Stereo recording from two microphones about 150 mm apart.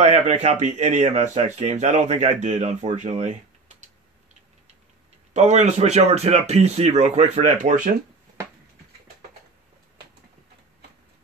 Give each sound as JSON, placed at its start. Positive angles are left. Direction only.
{"t": 0.0, "sound": "speech", "side_deg": -50}
{"t": 5.3, "sound": "speech", "side_deg": -50}